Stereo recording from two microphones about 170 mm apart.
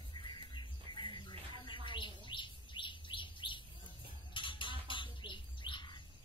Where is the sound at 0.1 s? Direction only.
25° left (ahead or behind).